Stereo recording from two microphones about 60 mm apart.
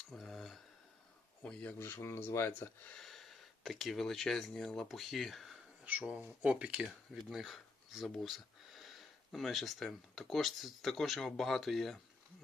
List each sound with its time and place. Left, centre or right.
0.1 s cutlery: centre
1.8 s speech: left
2.9 s speech: centre
6.0 s speech: right
7.1 s speech: centre